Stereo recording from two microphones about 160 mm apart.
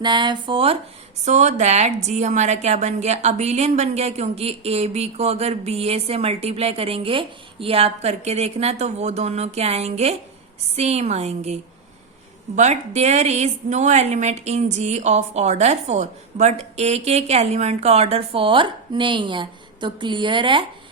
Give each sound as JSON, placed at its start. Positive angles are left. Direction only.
{"t": 0.0, "sound": "a woman's voice", "side_deg": -30}
{"t": 1.2, "sound": "a woman's voice", "side_deg": -45}